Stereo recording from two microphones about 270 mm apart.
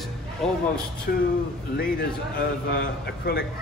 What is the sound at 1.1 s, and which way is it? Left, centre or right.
Speech, left.